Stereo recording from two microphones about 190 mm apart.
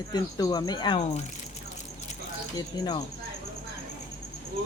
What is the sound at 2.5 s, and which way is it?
Cricket, 20° left (ahead or behind).